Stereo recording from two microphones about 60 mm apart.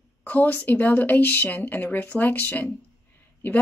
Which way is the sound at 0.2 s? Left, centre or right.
Left.